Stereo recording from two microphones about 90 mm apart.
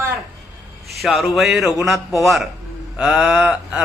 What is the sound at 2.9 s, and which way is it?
Speech, 10° right (ahead or behind).